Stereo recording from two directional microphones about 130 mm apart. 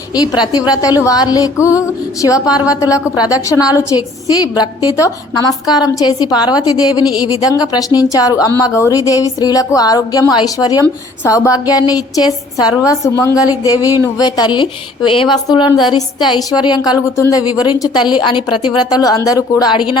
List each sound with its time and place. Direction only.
0.2 s a woman's voice: 30° left (ahead or behind)
2.5 s a woman's voice: 10° right (ahead or behind)
2.8 s a woman's voice: 25° left (ahead or behind)